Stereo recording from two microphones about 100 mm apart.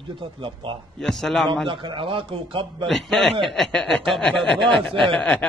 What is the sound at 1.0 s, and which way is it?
Speech, 5° left (ahead or behind).